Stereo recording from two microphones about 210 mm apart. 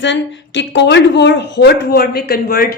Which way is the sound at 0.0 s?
60° left (ahead or behind).